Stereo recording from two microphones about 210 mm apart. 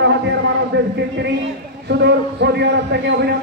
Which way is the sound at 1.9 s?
55° right (ahead or behind).